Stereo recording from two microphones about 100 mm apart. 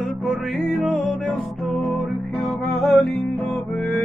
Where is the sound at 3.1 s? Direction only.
15° left (ahead or behind).